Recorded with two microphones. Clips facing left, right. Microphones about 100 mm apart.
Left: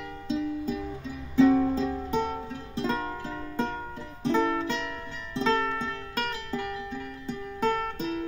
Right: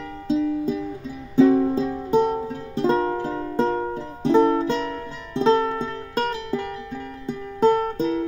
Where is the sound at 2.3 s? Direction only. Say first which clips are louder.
Right 7 dB; 40° right (ahead or behind).